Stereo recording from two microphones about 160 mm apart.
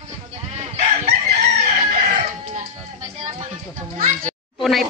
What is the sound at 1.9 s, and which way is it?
Chicken, 60° right (ahead or behind).